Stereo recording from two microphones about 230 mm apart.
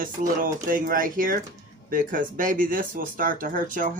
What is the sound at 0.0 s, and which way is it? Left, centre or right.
Speech, right.